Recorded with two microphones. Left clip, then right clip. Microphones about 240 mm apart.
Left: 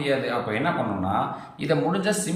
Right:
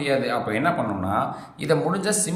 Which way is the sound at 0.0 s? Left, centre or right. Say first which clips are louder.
Right 2 dB; centre.